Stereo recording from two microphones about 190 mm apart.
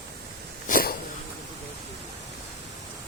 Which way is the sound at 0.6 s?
45° left (ahead or behind).